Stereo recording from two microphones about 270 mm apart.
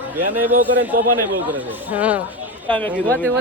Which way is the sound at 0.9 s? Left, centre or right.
Right.